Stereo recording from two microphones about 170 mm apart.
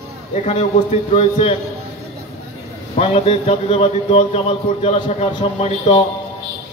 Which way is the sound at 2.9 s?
35° left (ahead or behind).